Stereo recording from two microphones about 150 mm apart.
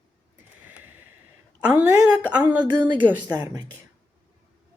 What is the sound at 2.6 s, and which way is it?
Speech, 30° right (ahead or behind).